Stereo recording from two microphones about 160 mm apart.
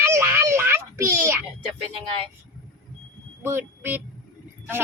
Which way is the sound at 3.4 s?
15° right (ahead or behind).